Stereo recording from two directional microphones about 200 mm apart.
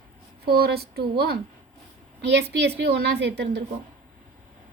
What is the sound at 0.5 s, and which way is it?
Speech, 50° right (ahead or behind).